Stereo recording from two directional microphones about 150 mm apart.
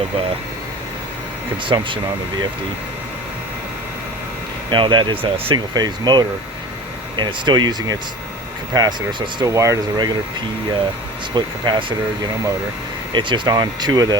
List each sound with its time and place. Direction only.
1.6 s speech: 35° right (ahead or behind)
4.7 s speech: 30° right (ahead or behind)
11.3 s speech: 30° right (ahead or behind)